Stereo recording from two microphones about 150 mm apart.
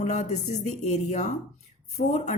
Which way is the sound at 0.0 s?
55° left (ahead or behind).